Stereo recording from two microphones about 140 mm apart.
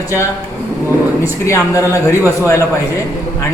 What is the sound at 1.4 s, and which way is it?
Speech, 20° left (ahead or behind).